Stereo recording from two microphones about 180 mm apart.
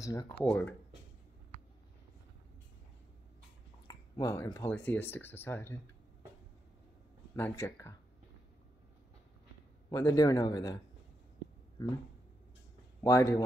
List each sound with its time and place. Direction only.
0.0 s speech: 20° left (ahead or behind)
3.8 s speech: 20° left (ahead or behind)
7.3 s speech: 15° left (ahead or behind)
9.8 s speech: 20° left (ahead or behind)
13.0 s speech: 15° left (ahead or behind)